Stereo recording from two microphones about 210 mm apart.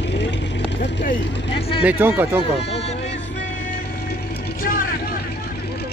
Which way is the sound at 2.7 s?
30° left (ahead or behind).